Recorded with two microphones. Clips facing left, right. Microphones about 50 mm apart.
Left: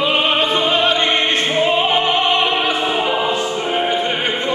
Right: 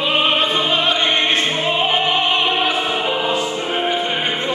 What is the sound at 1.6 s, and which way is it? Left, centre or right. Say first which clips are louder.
Music: left 2 dB; centre.